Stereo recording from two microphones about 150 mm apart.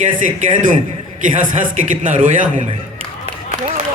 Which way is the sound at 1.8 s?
60° right (ahead or behind).